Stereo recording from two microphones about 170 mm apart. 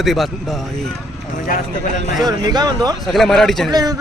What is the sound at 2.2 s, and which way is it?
Speech, 25° right (ahead or behind).